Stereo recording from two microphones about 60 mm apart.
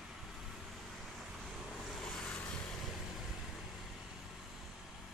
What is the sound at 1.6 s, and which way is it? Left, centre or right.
Vehicle, centre.